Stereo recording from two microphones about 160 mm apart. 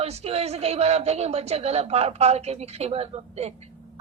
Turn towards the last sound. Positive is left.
turn(degrees=-40)  # may be behind; listen again after turning